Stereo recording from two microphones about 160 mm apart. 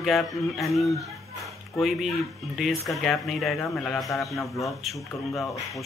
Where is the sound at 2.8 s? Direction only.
Centre (ahead or behind).